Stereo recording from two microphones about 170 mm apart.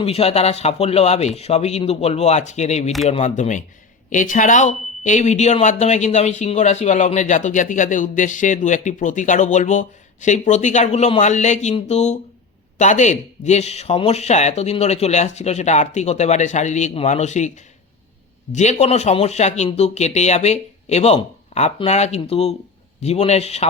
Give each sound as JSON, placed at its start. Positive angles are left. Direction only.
{"t": 0.0, "sound": "speech", "side_deg": 35}
{"t": 18.5, "sound": "speech", "side_deg": 40}